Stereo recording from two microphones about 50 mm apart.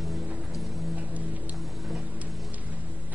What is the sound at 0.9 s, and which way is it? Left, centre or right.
Music, right.